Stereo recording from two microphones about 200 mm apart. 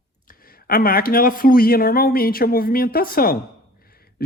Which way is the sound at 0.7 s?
50° left (ahead or behind).